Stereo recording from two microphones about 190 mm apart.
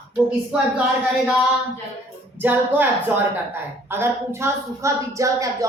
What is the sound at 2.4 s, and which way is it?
A woman's voice, 10° right (ahead or behind).